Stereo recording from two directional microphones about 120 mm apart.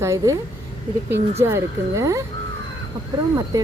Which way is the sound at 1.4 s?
25° right (ahead or behind).